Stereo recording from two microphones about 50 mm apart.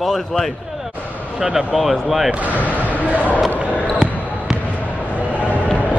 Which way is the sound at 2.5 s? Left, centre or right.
Left.